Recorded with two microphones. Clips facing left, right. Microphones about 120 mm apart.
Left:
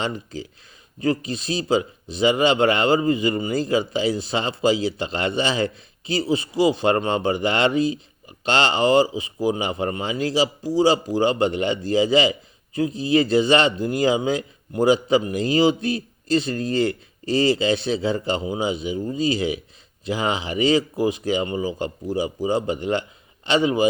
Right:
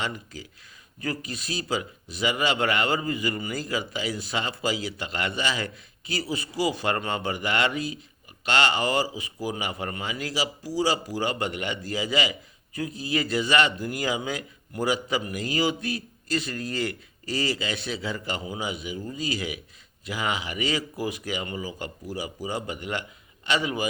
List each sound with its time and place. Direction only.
0.0 s a man's voice: 25° left (ahead or behind)